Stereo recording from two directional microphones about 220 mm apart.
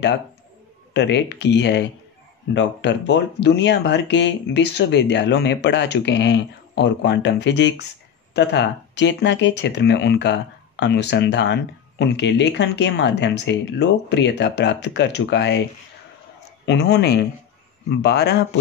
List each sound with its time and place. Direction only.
0.9 s speech: 50° left (ahead or behind)
16.6 s speech: 50° left (ahead or behind)